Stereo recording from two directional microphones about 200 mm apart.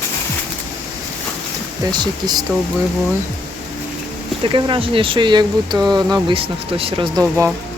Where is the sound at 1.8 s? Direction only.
20° right (ahead or behind).